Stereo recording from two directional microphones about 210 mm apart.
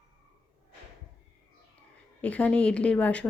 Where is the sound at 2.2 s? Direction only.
5° left (ahead or behind).